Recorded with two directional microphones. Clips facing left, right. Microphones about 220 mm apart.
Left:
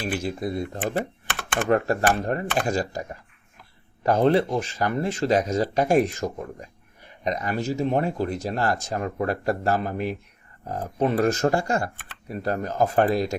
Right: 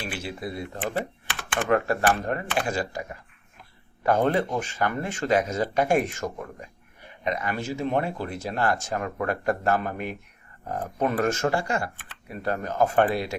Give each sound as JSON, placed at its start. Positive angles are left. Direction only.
{"t": 0.0, "sound": "speech", "side_deg": 40}
{"t": 4.0, "sound": "speech", "side_deg": 35}